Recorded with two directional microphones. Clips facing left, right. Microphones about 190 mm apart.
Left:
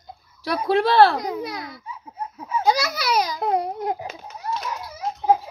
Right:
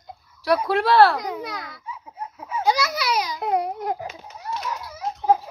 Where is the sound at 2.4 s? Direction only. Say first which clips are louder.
Left 1 dB; 40° left (ahead or behind).